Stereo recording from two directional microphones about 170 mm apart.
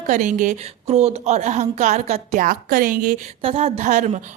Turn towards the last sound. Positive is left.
turn(degrees=-45)  # may be behind; listen again after turning